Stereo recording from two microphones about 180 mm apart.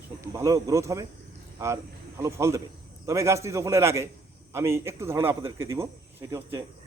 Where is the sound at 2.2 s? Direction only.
15° right (ahead or behind).